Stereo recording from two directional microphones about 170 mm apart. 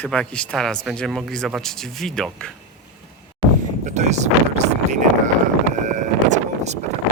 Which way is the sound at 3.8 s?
45° right (ahead or behind).